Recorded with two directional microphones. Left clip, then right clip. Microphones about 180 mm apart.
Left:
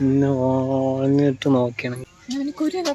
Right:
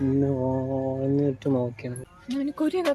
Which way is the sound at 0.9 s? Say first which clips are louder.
Left 6 dB; 20° left (ahead or behind).